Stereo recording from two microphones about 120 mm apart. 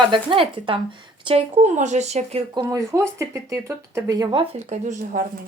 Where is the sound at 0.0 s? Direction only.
45° right (ahead or behind).